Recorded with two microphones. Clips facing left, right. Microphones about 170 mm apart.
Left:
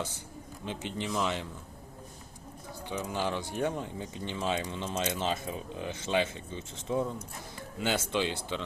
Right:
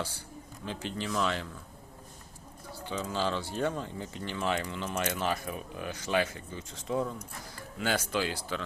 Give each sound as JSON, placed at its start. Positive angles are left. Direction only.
{"t": 0.6, "sound": "speech", "side_deg": 20}
{"t": 2.9, "sound": "speech", "side_deg": 15}